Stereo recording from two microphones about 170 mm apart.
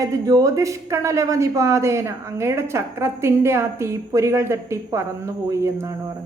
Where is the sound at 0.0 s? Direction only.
20° right (ahead or behind).